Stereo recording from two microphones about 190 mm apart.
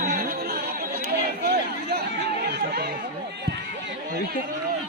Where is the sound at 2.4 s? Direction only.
60° right (ahead or behind).